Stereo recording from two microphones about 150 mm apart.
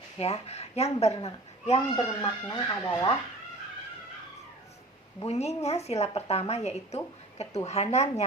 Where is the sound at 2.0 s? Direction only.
25° left (ahead or behind).